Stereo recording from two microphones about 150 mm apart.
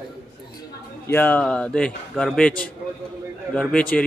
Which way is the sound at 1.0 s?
10° left (ahead or behind).